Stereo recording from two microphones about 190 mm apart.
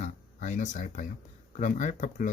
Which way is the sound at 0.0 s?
40° left (ahead or behind).